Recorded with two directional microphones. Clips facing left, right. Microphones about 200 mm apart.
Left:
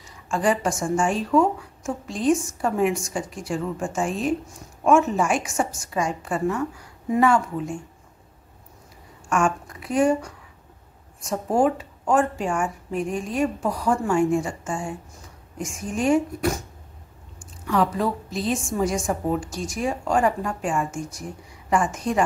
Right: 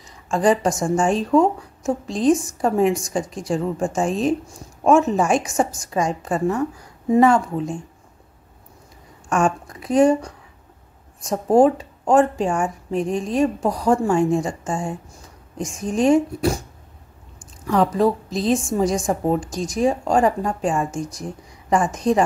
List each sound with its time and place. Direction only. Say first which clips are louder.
0.3 s speech: right 4 dB; 35° right (ahead or behind)
9.3 s speech: right 3 dB; 35° right (ahead or behind)
17.6 s a woman's voice: right 5 dB; 40° right (ahead or behind)